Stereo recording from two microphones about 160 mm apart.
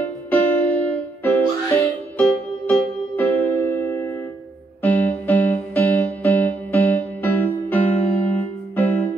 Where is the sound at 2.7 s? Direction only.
15° left (ahead or behind).